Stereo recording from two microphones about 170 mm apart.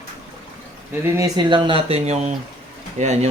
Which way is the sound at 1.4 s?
30° right (ahead or behind).